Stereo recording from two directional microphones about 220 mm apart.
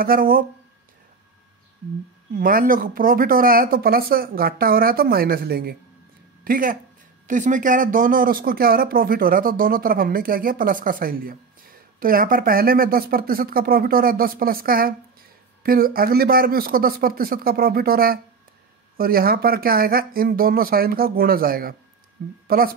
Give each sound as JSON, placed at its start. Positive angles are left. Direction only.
{"t": 0.0, "sound": "speech", "side_deg": -40}
{"t": 2.3, "sound": "speech", "side_deg": -40}